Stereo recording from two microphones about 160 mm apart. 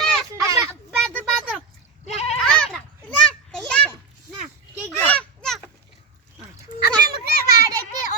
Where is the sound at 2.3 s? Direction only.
5° left (ahead or behind).